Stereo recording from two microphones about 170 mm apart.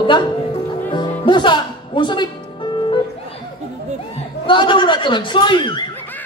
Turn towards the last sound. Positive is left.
turn(degrees=30)  # may be behind; listen again after turning